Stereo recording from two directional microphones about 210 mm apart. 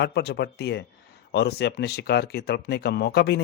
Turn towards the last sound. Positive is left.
turn(degrees=50)  # may be behind; listen again after turning